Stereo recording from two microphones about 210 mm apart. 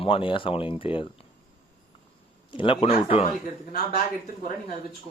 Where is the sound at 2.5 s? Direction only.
25° left (ahead or behind).